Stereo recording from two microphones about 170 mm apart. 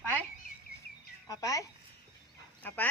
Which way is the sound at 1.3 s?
20° left (ahead or behind).